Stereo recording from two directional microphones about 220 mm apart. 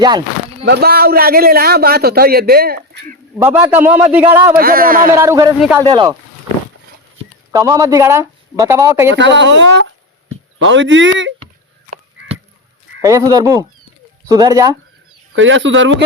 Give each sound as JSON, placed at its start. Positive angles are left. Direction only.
{"t": 0.6, "sound": "a man's voice", "side_deg": -50}
{"t": 3.3, "sound": "speech", "side_deg": -10}
{"t": 4.5, "sound": "speech", "side_deg": -40}
{"t": 5.1, "sound": "speech", "side_deg": -10}
{"t": 5.5, "sound": "speech", "side_deg": -5}
{"t": 5.8, "sound": "speech", "side_deg": -20}
{"t": 7.5, "sound": "speech", "side_deg": -15}
{"t": 9.1, "sound": "speech", "side_deg": -55}
{"t": 13.0, "sound": "speech", "side_deg": -15}
{"t": 15.4, "sound": "speech", "side_deg": -60}